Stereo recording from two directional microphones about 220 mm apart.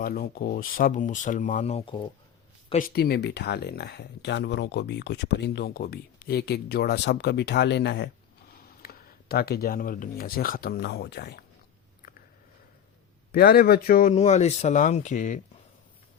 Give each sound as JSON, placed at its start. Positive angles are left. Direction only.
{"t": 0.0, "sound": "speech", "side_deg": 40}
{"t": 2.7, "sound": "speech", "side_deg": 45}
{"t": 13.3, "sound": "speech", "side_deg": 45}